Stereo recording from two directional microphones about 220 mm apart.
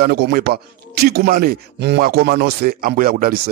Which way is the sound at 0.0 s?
45° right (ahead or behind).